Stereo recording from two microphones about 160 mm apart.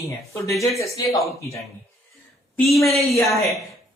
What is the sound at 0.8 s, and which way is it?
Speech, 20° left (ahead or behind).